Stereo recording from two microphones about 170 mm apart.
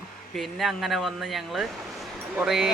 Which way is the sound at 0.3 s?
Centre (ahead or behind).